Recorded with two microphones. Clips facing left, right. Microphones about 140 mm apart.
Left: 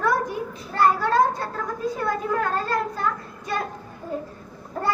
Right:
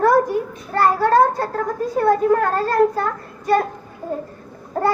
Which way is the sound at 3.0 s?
50° right (ahead or behind).